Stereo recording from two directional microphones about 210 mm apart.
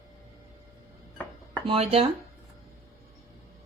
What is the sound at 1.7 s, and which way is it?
Speech, 30° right (ahead or behind).